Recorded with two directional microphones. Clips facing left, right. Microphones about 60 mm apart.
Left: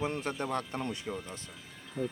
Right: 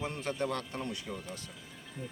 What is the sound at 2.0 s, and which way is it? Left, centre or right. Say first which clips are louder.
Speech: left 9 dB; left.